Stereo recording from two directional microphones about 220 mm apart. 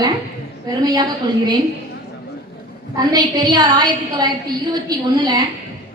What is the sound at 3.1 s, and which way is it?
A woman's voice, 20° right (ahead or behind).